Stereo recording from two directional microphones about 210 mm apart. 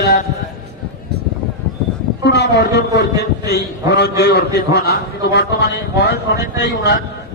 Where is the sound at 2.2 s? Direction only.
55° left (ahead or behind).